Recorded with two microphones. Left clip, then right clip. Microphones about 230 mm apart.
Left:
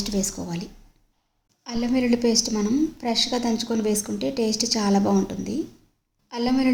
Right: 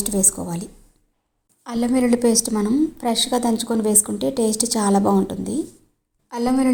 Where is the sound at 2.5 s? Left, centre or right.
Centre.